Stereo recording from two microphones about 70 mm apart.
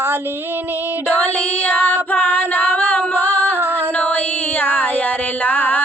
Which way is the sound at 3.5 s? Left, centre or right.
Right.